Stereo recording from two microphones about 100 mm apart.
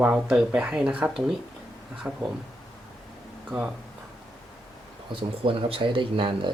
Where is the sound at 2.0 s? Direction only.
25° right (ahead or behind).